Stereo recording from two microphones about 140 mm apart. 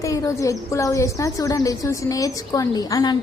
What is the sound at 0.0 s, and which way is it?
Speech, 25° left (ahead or behind).